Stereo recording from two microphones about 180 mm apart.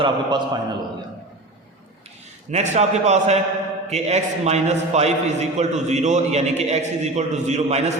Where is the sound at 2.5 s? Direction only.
40° right (ahead or behind).